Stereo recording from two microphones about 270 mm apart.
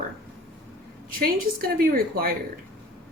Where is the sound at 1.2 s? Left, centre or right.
Right.